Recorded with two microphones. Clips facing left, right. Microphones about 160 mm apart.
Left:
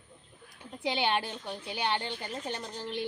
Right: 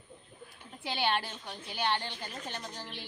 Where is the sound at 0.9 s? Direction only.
15° left (ahead or behind).